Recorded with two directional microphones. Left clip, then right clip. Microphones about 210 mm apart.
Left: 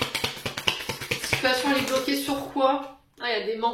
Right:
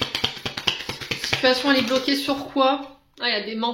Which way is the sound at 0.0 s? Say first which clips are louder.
Right 3 dB; 30° right (ahead or behind).